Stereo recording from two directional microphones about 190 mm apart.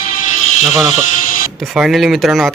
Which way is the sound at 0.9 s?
45° left (ahead or behind).